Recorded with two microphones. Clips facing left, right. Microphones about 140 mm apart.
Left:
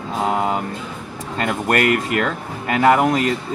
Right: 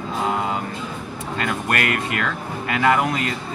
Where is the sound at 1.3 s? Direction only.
40° left (ahead or behind).